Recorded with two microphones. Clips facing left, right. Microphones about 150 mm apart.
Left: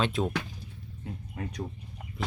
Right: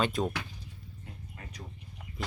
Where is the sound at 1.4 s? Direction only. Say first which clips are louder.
Left 14 dB; 70° left (ahead or behind).